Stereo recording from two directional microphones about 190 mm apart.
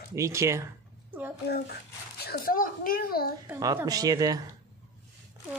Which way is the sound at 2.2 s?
50° left (ahead or behind).